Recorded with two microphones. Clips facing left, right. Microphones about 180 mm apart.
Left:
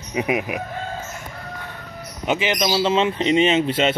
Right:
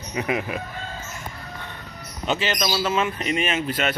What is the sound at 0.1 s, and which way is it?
Speech, 15° left (ahead or behind).